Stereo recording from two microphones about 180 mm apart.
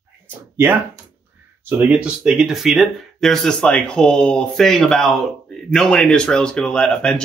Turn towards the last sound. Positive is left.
turn(degrees=5)  # may be behind; listen again after turning